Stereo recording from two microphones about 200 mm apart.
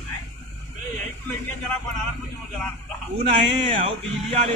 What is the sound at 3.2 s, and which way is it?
Speech, 35° right (ahead or behind).